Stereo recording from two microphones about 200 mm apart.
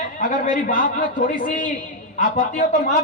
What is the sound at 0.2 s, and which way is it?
Speech, 40° left (ahead or behind).